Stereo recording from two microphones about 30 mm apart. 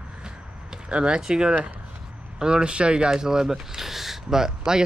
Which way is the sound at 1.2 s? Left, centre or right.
Right.